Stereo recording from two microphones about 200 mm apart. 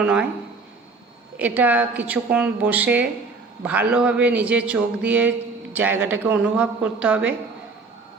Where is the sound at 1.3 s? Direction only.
10° right (ahead or behind).